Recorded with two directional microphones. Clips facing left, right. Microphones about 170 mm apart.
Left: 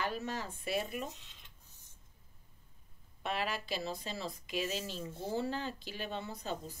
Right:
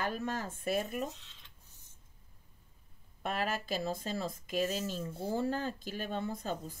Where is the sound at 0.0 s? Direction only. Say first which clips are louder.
Right 2 dB; 45° right (ahead or behind).